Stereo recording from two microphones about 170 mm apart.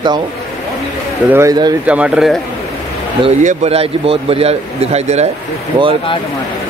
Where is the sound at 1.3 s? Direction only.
20° right (ahead or behind).